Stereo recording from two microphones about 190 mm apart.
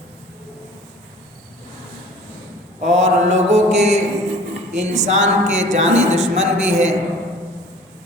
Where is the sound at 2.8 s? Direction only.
35° right (ahead or behind).